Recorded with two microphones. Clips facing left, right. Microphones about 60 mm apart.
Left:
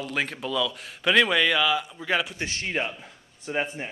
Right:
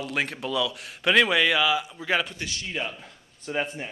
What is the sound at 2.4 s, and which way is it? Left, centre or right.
Speech, left.